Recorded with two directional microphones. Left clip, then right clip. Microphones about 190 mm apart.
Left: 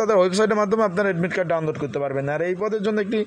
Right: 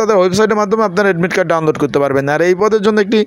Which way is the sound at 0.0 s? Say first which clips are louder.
Right 7 dB; 15° right (ahead or behind).